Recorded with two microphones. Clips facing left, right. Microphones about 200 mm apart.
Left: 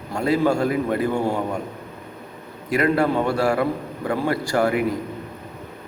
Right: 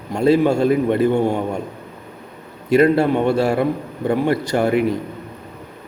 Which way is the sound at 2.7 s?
25° right (ahead or behind).